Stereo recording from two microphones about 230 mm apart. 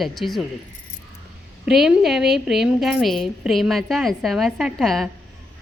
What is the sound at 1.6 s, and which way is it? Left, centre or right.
Speech, centre.